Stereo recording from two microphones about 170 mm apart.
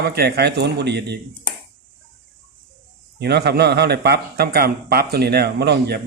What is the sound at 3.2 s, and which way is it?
Speech, 75° right (ahead or behind).